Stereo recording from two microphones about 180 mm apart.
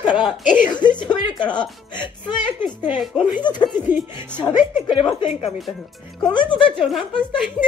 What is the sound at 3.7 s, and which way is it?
Music, 45° left (ahead or behind).